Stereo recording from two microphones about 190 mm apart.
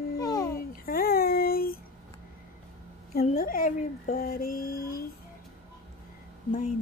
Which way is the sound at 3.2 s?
50° left (ahead or behind).